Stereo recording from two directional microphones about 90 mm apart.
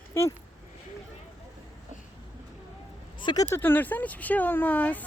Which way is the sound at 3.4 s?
25° left (ahead or behind).